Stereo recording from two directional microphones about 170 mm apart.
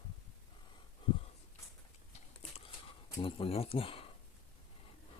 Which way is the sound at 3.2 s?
35° left (ahead or behind).